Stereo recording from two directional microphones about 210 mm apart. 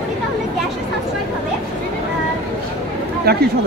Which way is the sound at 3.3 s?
50° right (ahead or behind).